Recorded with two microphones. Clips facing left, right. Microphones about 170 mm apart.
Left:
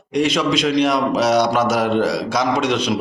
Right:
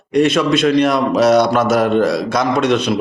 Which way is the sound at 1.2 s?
55° right (ahead or behind).